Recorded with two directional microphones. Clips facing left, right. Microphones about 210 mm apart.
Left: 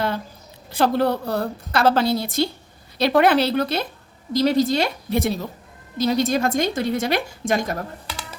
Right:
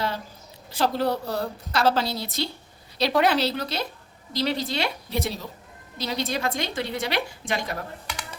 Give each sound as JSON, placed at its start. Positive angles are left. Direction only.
{"t": 0.7, "sound": "a woman's voice", "side_deg": 55}